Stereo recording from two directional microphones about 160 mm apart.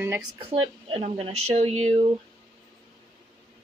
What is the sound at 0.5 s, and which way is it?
Speech, 35° right (ahead or behind).